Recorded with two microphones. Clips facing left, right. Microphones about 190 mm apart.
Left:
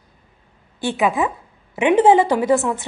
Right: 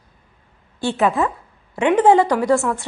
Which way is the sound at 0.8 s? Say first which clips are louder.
Right 1 dB; 15° left (ahead or behind).